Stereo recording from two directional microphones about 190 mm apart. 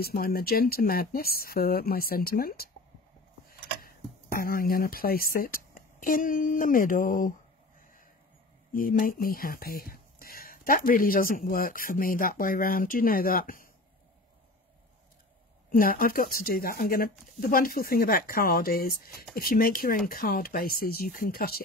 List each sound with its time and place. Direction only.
0.0 s speech: 50° left (ahead or behind)
3.8 s speech: 50° left (ahead or behind)
8.7 s speech: 45° left (ahead or behind)
15.7 s speech: 50° left (ahead or behind)